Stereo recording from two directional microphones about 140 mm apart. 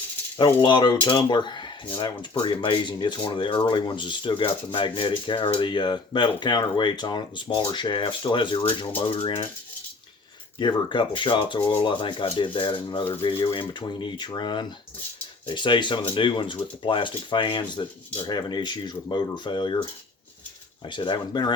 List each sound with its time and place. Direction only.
0.3 s speech: 35° left (ahead or behind)
10.6 s speech: 35° left (ahead or behind)